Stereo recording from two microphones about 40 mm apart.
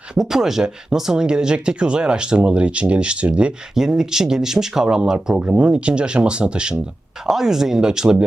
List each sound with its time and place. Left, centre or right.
0.1 s speech: centre; by 3.5 s right
3.8 s speech: centre
7.3 s speech: centre